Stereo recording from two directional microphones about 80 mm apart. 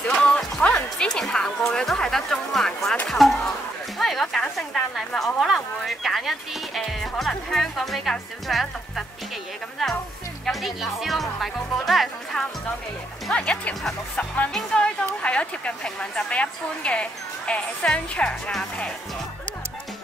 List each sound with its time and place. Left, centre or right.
0.0 s music: centre
3.1 s a sound: centre
4.6 s speech: centre
10.4 s speech: centre
13.5 s a woman's voice: centre